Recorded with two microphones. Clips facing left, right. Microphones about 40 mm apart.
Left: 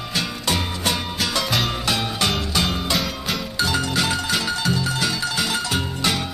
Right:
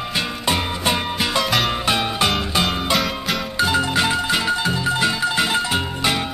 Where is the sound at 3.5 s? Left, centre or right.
Right.